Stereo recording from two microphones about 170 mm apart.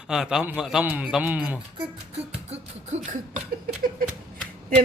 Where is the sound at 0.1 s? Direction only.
5° right (ahead or behind).